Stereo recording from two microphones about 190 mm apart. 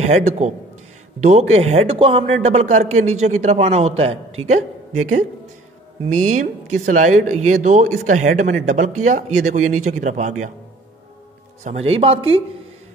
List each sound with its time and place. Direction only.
0.1 s speech: 35° right (ahead or behind)
11.6 s speech: 35° right (ahead or behind)